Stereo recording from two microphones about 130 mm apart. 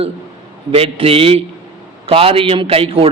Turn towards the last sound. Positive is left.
turn(degrees=-45)  # may be behind; listen again after turning